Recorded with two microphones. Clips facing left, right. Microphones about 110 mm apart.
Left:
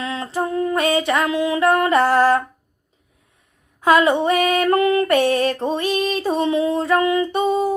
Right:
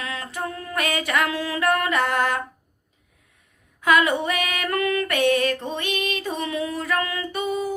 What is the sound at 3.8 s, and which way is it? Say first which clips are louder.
Female singing: left 5 dB; 30° left (ahead or behind).